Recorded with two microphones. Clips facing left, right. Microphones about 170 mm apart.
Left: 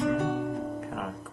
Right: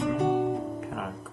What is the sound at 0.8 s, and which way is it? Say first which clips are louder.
Music: even; centre (ahead or behind).